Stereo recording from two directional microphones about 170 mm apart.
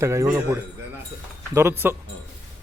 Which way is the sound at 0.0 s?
15° right (ahead or behind).